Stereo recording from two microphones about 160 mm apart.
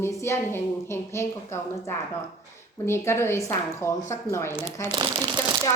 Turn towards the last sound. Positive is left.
turn(degrees=-30)  # may be behind; listen again after turning